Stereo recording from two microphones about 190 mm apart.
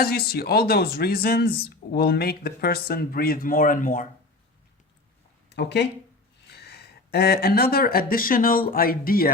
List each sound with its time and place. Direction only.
0.0 s speech: 55° left (ahead or behind)
5.5 s speech: 60° left (ahead or behind)
6.5 s a sound: 60° left (ahead or behind)
8.1 s speech: 45° left (ahead or behind)